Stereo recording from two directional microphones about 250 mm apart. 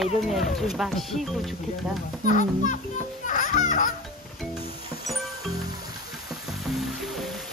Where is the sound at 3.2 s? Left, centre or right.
Left.